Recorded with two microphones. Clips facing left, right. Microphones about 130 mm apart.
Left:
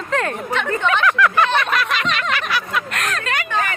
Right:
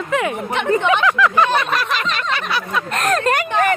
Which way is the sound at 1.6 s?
35° right (ahead or behind).